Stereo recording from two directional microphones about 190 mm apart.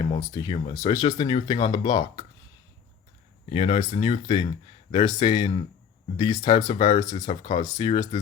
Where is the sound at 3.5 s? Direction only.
30° left (ahead or behind).